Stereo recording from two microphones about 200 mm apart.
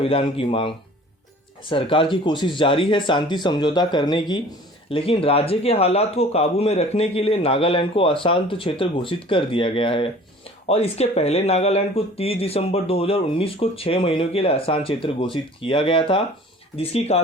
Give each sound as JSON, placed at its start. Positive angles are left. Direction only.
{"t": 0.0, "sound": "speech", "side_deg": 30}
{"t": 1.7, "sound": "speech", "side_deg": 25}